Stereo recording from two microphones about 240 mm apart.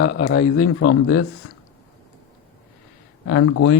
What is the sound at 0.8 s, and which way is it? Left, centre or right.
Speech, left.